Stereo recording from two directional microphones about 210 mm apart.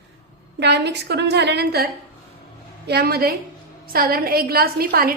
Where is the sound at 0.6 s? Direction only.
50° right (ahead or behind).